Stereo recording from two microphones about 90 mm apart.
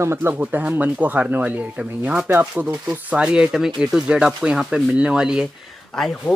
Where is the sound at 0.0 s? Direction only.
30° right (ahead or behind); by 5.5 s 10° right (ahead or behind).